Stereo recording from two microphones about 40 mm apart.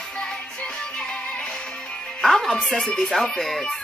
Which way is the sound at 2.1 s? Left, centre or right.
Centre.